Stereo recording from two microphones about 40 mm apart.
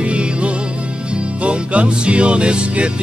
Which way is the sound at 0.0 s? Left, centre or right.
Right.